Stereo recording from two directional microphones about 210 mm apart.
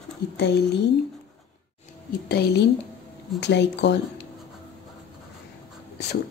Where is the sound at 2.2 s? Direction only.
50° left (ahead or behind).